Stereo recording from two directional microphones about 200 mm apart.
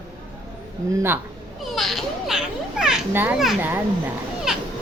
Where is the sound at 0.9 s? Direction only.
15° right (ahead or behind).